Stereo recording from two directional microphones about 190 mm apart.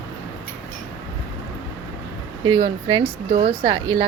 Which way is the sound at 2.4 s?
25° right (ahead or behind).